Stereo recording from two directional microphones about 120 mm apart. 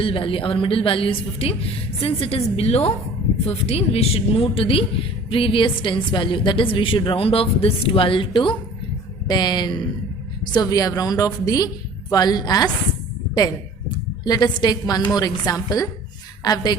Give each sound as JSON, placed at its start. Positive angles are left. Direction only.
{"t": 0.0, "sound": "a woman's voice", "side_deg": 50}